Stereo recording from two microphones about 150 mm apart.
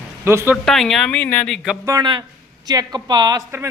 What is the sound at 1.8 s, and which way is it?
Speech, 25° right (ahead or behind).